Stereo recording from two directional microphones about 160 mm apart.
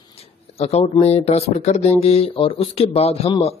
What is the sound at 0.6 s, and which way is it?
Speech, 40° left (ahead or behind).